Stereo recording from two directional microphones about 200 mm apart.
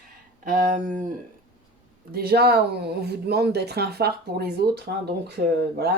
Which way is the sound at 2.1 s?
50° right (ahead or behind).